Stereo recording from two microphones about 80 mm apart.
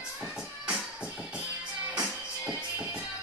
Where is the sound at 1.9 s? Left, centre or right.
Centre.